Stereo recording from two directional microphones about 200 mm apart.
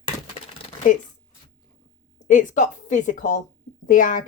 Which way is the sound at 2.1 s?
40° left (ahead or behind).